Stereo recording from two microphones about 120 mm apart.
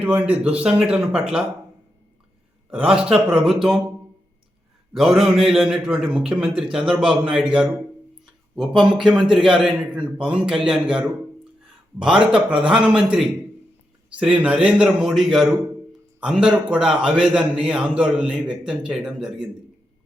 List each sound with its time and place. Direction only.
0.0 s a man's voice: 10° right (ahead or behind)
2.6 s a man's voice: 5° right (ahead or behind)
4.9 s a man's voice: centre (ahead or behind)
12.2 s a man's voice: 10° right (ahead or behind)